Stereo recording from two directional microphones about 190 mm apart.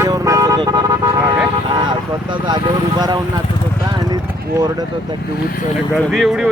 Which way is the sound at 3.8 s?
20° right (ahead or behind).